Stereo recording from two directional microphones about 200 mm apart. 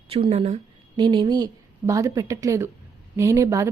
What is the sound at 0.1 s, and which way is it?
A woman's voice, 30° right (ahead or behind).